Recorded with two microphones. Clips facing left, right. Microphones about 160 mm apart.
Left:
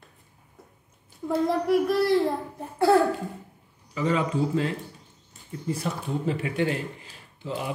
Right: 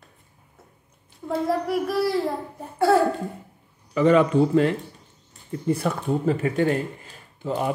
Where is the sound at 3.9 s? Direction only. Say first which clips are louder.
Right 8 dB; 65° right (ahead or behind).